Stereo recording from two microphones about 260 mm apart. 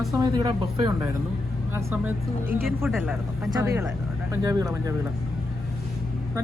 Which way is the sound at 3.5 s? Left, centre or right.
Centre.